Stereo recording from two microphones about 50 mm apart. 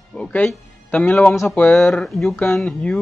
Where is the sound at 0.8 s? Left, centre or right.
Left.